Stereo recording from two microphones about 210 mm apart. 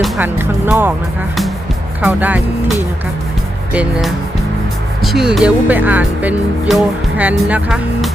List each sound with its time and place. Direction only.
0.0 s speech: 10° right (ahead or behind)
2.0 s speech: 5° right (ahead or behind)